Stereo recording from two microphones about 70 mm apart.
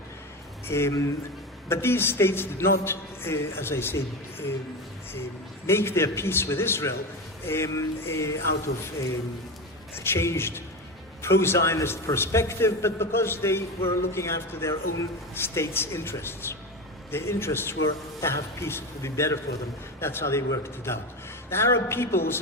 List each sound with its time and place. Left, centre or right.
0.7 s a man's voice: left
5.6 s a man's voice: left
9.9 s a man's voice: left
21.5 s a man's voice: left